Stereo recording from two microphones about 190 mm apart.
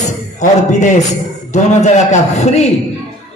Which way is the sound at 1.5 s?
35° left (ahead or behind).